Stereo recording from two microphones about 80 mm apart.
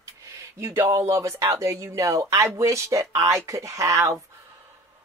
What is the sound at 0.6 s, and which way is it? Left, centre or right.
A woman's voice, right.